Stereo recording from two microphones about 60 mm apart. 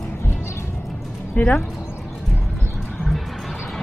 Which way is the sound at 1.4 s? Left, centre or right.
Left.